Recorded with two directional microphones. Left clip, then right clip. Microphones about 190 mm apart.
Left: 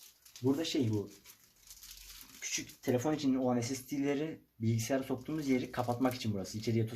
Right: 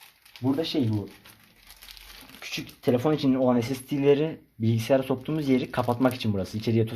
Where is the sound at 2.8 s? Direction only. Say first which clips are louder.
Right 10 dB; 35° right (ahead or behind).